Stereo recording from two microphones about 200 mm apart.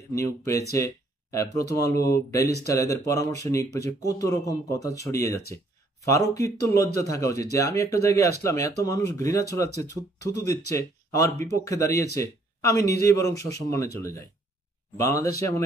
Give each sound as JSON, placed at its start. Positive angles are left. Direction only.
{"t": 0.1, "sound": "speech", "side_deg": 15}